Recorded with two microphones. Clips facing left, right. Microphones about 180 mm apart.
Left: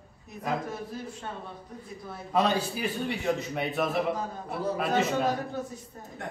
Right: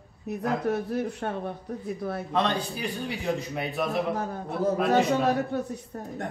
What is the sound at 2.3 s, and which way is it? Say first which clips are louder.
A man's voice: left 3 dB; 5° left (ahead or behind).